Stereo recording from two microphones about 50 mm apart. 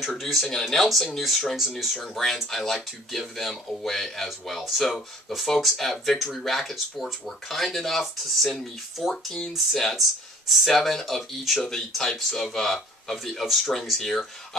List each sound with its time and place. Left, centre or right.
0.1 s speech: centre
9.1 s speech: centre
10.5 s speech: centre